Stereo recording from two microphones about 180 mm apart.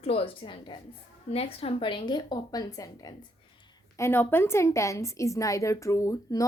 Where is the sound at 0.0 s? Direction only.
35° left (ahead or behind).